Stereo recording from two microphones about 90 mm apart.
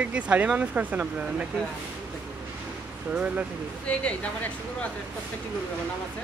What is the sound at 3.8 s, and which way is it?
Speech, 15° left (ahead or behind).